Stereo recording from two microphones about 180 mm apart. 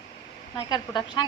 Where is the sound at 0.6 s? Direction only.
20° left (ahead or behind).